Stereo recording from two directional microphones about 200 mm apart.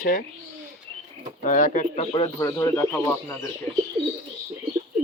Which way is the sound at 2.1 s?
20° left (ahead or behind).